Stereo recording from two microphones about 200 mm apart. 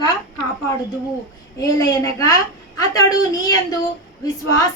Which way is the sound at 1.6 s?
15° left (ahead or behind).